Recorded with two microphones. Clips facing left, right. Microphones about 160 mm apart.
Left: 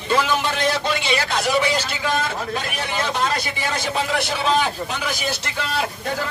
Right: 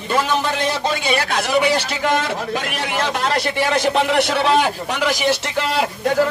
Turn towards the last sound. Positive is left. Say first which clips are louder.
# right 7 dB
turn(degrees=-85)